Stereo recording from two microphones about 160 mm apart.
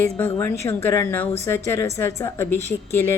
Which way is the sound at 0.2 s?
15° left (ahead or behind).